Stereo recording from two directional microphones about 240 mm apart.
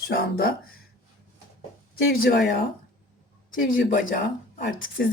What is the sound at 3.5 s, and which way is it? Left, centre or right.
Speech, left.